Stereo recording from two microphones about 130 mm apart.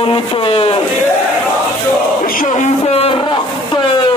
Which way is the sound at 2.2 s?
90° left.